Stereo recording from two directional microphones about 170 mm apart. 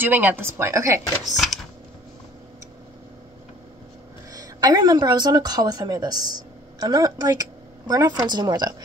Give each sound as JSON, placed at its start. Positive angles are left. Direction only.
{"t": 0.0, "sound": "speech", "side_deg": -10}
{"t": 1.2, "sound": "speech", "side_deg": 0}
{"t": 4.3, "sound": "a woman's voice", "side_deg": -20}